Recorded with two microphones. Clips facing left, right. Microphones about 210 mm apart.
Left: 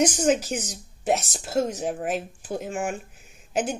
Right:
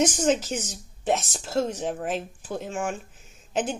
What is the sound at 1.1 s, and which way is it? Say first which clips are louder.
Speech: left 1 dB; 40° left (ahead or behind).